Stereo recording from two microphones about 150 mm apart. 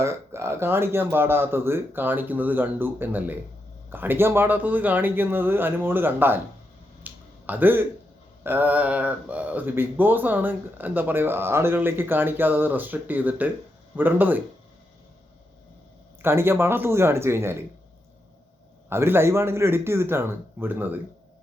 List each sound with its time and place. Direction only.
0.0 s speech: 15° right (ahead or behind)
7.0 s a sound: 10° right (ahead or behind)
8.4 s speech: 10° right (ahead or behind)
16.2 s speech: 15° right (ahead or behind)
18.9 s speech: 15° right (ahead or behind)